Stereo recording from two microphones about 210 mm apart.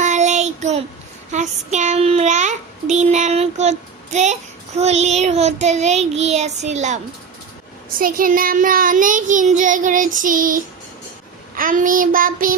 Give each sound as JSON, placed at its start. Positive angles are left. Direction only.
{"t": 0.0, "sound": "child singing", "side_deg": -35}